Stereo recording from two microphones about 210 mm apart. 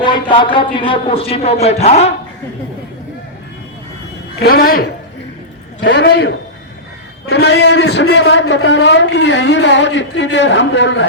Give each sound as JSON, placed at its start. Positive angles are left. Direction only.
{"t": 0.0, "sound": "a man's voice", "side_deg": 20}
{"t": 4.4, "sound": "a man's voice", "side_deg": 45}
{"t": 5.8, "sound": "a woman's voice", "side_deg": 55}
{"t": 7.3, "sound": "a man's voice", "side_deg": 55}